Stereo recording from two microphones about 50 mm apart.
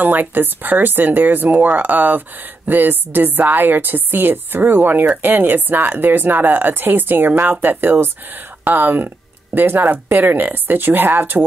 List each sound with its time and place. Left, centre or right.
0.0 s speech: right